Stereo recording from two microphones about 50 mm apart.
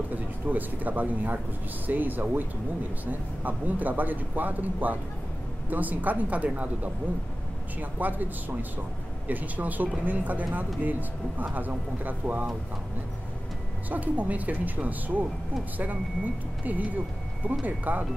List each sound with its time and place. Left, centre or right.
0.1 s speech: right
8.0 s speech: right
13.8 s speech: right
16.6 s speech: right